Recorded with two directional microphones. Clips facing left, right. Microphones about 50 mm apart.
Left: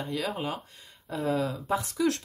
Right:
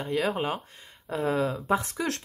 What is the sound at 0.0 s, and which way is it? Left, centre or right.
Speech, right.